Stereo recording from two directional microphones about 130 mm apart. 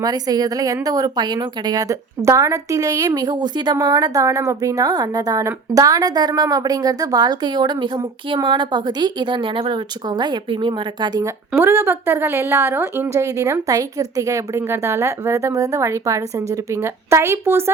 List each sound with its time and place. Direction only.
0.0 s a woman's voice: 30° right (ahead or behind)
11.5 s a woman's voice: 20° right (ahead or behind)